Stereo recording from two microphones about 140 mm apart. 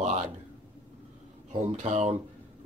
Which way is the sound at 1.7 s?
55° right (ahead or behind).